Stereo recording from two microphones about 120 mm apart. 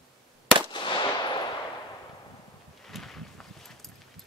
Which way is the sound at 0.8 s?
40° left (ahead or behind).